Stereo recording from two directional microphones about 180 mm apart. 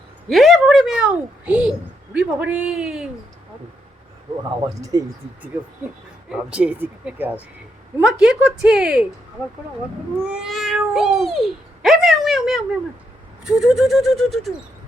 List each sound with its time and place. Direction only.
0.3 s a woman's voice: centre (ahead or behind)
4.8 s speech: 20° right (ahead or behind)
6.3 s a woman's voice: 5° right (ahead or behind)
10.2 s a woman's voice: 5° right (ahead or behind)